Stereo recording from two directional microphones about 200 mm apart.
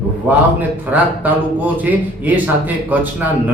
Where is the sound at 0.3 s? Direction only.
10° right (ahead or behind).